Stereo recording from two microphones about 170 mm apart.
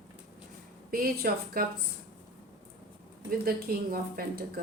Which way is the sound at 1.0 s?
60° right (ahead or behind).